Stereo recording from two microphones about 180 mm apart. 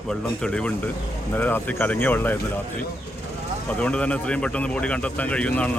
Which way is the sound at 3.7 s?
5° left (ahead or behind).